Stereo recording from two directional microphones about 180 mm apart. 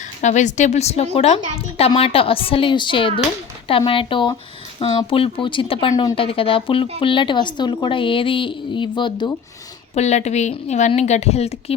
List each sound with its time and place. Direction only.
0.2 s a woman's voice: 40° left (ahead or behind); by 9.3 s 25° left (ahead or behind)
9.9 s a woman's voice: 40° left (ahead or behind)